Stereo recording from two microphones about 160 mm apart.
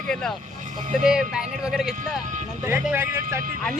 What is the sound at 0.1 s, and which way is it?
A man's voice, 5° left (ahead or behind).